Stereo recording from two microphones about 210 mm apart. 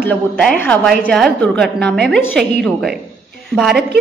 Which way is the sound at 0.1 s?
5° left (ahead or behind).